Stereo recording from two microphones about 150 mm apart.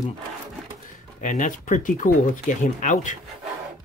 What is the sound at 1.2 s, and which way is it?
Speech, 55° left (ahead or behind).